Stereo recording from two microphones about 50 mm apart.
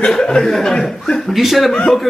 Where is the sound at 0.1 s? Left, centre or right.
Centre.